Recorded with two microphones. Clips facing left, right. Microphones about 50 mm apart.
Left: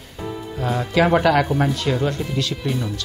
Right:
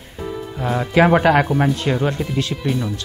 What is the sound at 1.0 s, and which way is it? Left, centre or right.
Speech, right.